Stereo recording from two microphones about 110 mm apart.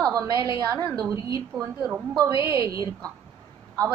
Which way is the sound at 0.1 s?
30° right (ahead or behind).